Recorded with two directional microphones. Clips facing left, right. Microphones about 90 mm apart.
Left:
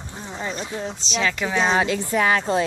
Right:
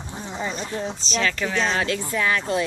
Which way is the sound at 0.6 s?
5° left (ahead or behind).